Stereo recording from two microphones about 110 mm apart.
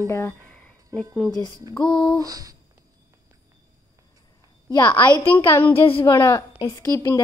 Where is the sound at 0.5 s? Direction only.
10° left (ahead or behind).